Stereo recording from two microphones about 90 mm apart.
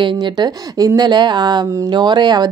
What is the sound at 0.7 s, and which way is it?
A woman's voice, 45° right (ahead or behind).